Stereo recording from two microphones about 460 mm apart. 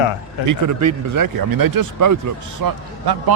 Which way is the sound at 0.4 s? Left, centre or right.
Right.